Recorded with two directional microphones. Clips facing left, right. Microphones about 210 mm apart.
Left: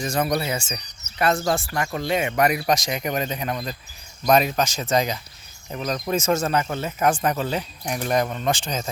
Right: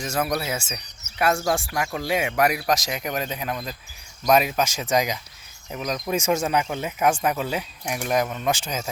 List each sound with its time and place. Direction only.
0.0 s speech: 5° right (ahead or behind)